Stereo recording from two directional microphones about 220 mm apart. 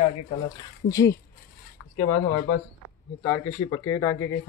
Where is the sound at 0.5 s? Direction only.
15° left (ahead or behind).